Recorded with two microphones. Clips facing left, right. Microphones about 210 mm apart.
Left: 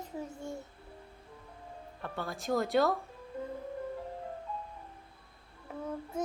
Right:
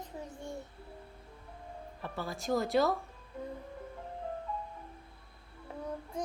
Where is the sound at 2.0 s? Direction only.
Centre (ahead or behind).